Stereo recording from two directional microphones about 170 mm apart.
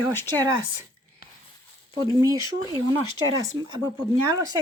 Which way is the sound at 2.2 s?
20° right (ahead or behind).